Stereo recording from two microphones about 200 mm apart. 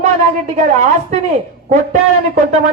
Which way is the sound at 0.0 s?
35° right (ahead or behind).